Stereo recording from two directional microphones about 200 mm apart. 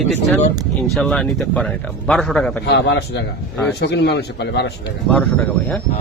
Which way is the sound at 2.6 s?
60° left (ahead or behind).